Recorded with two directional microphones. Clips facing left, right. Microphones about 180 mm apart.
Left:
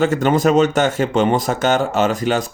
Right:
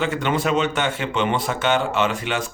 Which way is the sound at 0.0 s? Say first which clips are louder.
Left 7 dB; 45° left (ahead or behind).